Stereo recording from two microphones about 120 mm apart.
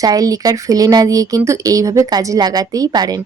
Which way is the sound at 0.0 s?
30° right (ahead or behind).